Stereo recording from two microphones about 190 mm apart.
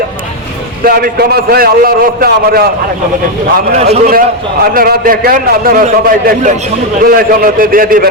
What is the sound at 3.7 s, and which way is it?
Speech, 35° right (ahead or behind).